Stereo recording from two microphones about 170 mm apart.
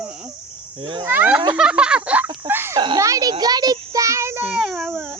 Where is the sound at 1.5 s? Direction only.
5° right (ahead or behind).